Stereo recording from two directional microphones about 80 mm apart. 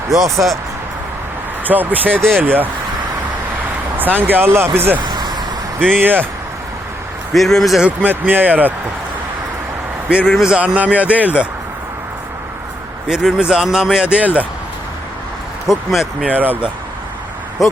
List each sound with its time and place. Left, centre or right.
1.6 s speech: right
3.9 s speech: right
4.9 s vehicle: right
6.0 s speech: right
7.3 s a man's voice: centre
7.9 s speech: right
10.1 s a man's voice: centre
13.1 s a man's voice: centre
15.6 s a man's voice: centre
16.2 s speech: right